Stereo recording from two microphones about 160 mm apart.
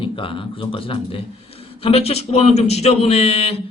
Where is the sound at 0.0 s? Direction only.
35° left (ahead or behind).